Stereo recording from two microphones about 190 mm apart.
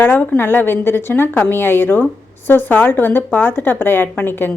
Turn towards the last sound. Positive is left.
turn(degrees=10)  # may be behind; listen again after turning